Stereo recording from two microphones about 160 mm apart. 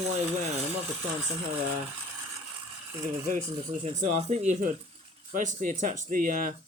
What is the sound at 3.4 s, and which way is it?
Speech, 40° right (ahead or behind).